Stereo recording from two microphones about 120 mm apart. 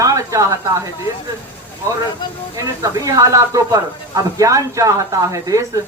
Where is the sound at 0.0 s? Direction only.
25° right (ahead or behind).